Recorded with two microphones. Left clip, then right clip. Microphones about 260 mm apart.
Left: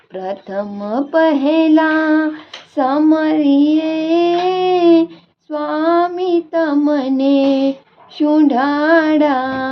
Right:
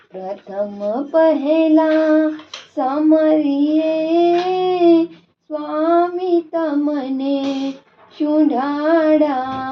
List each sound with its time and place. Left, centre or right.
0.2 s speech: left
2.7 s child singing: left
8.2 s speech: left